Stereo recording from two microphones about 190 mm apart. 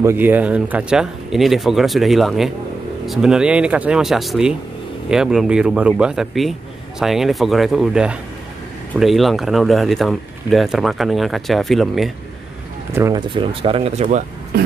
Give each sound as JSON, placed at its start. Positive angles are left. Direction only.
{"t": 0.0, "sound": "speech", "side_deg": -10}
{"t": 12.9, "sound": "speech", "side_deg": -15}
{"t": 13.3, "sound": "speech", "side_deg": -25}